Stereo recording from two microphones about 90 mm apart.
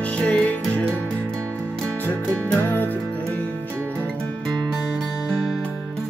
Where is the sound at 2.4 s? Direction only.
20° left (ahead or behind).